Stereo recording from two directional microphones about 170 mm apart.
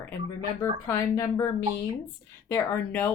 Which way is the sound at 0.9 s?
20° left (ahead or behind).